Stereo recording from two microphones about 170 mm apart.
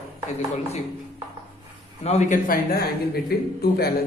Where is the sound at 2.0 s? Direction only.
40° left (ahead or behind).